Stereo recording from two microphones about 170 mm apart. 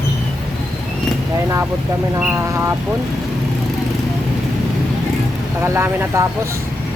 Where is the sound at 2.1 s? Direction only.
10° right (ahead or behind).